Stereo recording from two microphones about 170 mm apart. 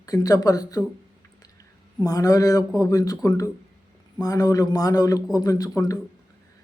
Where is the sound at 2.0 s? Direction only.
20° left (ahead or behind).